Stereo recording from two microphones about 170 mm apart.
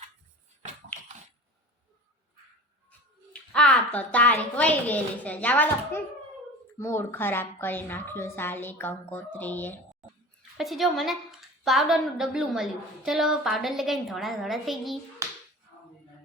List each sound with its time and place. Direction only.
3.5 s a woman's voice: 5° left (ahead or behind)
10.6 s a woman's voice: centre (ahead or behind)
15.2 s a sound: 15° right (ahead or behind)